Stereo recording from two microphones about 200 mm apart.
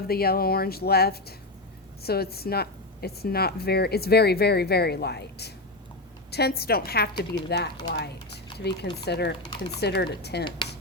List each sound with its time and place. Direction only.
0.1 s speech: 50° left (ahead or behind)